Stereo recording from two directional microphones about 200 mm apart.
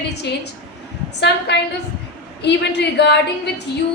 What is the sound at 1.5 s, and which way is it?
A woman's voice, 55° left (ahead or behind).